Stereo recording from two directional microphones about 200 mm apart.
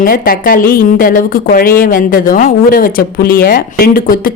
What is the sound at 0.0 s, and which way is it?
Speech, 45° left (ahead or behind).